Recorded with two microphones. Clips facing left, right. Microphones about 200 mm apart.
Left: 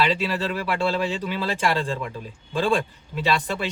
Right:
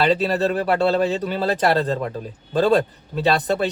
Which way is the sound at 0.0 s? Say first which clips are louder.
Right 5 dB; 45° right (ahead or behind).